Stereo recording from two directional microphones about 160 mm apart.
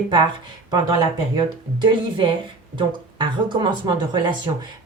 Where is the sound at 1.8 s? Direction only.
30° right (ahead or behind).